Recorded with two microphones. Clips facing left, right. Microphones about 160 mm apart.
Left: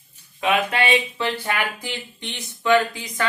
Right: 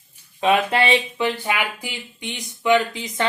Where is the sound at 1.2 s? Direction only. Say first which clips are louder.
Right 2 dB; 15° right (ahead or behind).